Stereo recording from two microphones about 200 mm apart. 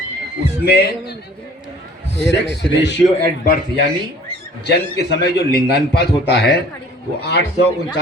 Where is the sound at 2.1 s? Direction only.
60° left (ahead or behind).